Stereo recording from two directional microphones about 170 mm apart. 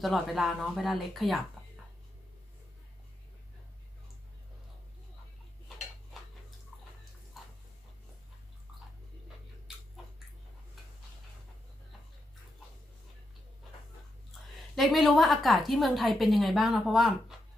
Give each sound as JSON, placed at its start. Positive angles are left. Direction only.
{"t": 0.0, "sound": "a woman's voice", "side_deg": 0}
{"t": 14.8, "sound": "a woman's voice", "side_deg": 0}